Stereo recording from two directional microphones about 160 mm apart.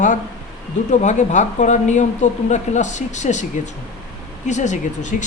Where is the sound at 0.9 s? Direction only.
50° left (ahead or behind).